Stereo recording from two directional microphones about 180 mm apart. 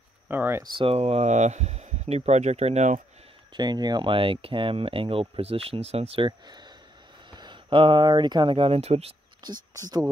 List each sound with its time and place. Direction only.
0.3 s speech: 10° right (ahead or behind)
0.7 s speech: 35° right (ahead or behind)
3.5 s speech: 25° right (ahead or behind)